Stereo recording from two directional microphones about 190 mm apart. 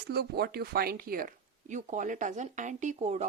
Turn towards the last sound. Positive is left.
turn(degrees=-35)  # may be behind; listen again after turning